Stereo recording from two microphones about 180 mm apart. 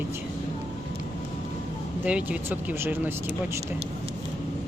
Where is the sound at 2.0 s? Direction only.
5° right (ahead or behind).